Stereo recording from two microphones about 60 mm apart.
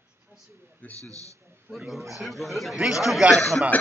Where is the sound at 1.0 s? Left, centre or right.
Right.